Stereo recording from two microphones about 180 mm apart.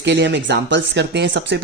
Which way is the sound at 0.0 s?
75° right (ahead or behind).